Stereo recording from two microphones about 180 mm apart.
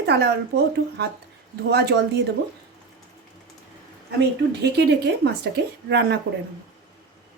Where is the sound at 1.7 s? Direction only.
65° right (ahead or behind).